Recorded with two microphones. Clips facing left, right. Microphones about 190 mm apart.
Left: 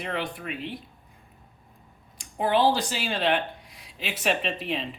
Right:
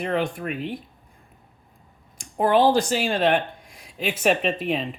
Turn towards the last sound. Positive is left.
turn(degrees=-50)  # may be behind; listen again after turning